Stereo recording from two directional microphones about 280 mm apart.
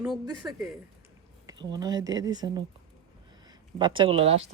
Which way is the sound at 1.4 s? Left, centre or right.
Centre.